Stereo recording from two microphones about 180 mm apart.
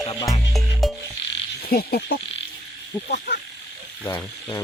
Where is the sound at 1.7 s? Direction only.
60° left (ahead or behind).